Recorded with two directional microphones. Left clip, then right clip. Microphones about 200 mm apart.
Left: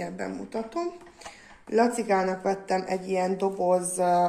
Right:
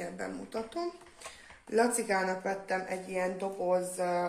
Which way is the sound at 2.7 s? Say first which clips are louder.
Left 7 dB; 50° left (ahead or behind).